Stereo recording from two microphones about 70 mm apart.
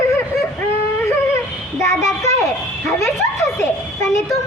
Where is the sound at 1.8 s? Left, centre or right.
Left.